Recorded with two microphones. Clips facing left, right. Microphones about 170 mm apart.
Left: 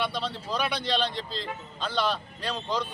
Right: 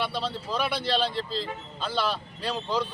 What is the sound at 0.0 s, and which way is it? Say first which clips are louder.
Speech: right 1 dB; 5° right (ahead or behind).